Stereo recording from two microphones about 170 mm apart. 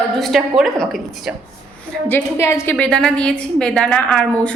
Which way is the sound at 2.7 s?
5° left (ahead or behind).